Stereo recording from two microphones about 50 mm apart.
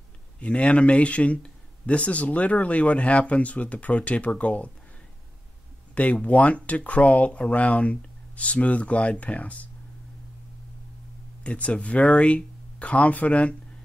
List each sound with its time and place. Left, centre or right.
0.4 s speech: left
5.9 s speech: left
11.4 s speech: left